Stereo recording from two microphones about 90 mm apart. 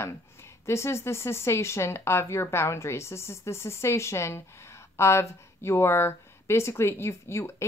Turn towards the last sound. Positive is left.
turn(degrees=30)  # may be behind; listen again after turning